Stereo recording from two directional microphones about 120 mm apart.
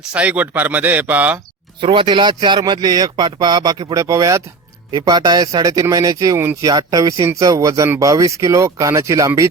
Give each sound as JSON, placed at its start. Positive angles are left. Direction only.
{"t": 0.1, "sound": "a man's voice", "side_deg": -10}
{"t": 1.8, "sound": "speech", "side_deg": -45}
{"t": 3.9, "sound": "speech", "side_deg": -25}